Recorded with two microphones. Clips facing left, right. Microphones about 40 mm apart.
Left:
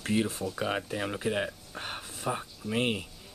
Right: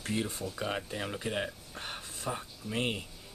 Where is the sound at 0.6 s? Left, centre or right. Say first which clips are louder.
Left 3 dB; centre.